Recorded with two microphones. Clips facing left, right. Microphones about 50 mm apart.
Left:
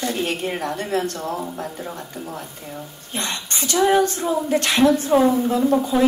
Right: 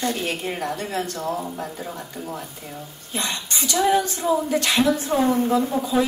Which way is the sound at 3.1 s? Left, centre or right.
Left.